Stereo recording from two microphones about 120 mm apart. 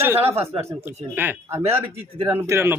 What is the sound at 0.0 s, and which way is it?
Speech, 20° right (ahead or behind).